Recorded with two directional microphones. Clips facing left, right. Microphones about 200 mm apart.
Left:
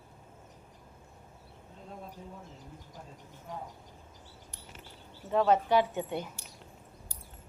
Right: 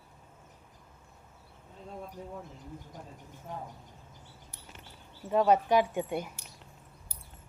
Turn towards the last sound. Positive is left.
turn(degrees=-10)  # may be behind; listen again after turning